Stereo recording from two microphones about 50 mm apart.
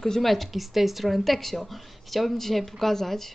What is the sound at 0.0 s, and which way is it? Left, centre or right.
Speech, centre.